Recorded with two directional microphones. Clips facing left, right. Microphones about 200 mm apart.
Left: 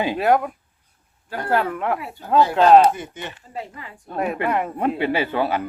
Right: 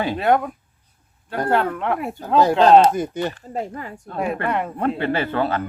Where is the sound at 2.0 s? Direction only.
45° right (ahead or behind).